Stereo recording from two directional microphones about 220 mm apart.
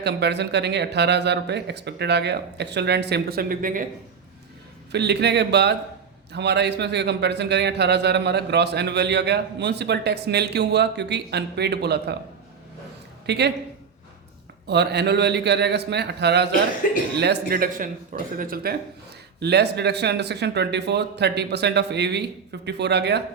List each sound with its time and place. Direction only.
0.0 s a man's voice: 50° right (ahead or behind)
4.9 s a man's voice: 50° right (ahead or behind)
13.2 s speech: 50° right (ahead or behind)
14.7 s a man's voice: 50° right (ahead or behind)
16.8 s speech: 40° left (ahead or behind)
17.2 s a man's voice: 45° right (ahead or behind)